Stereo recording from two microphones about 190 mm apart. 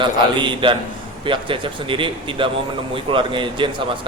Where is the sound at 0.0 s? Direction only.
25° right (ahead or behind).